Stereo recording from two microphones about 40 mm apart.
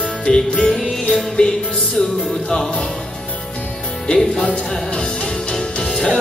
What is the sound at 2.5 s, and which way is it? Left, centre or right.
Music, centre.